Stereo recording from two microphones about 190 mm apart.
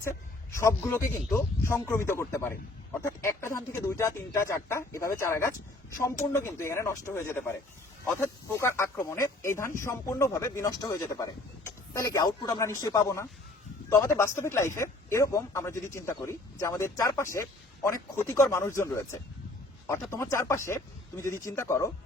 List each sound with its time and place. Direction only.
0.5 s speech: 15° left (ahead or behind)
8.6 s speech: 15° left (ahead or behind)